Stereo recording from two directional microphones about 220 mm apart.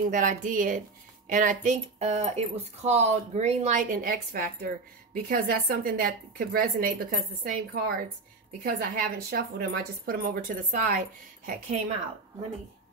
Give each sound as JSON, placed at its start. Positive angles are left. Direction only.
{"t": 0.1, "sound": "speech", "side_deg": -35}